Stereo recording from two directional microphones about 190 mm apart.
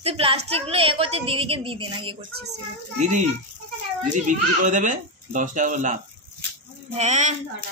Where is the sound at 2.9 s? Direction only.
40° right (ahead or behind).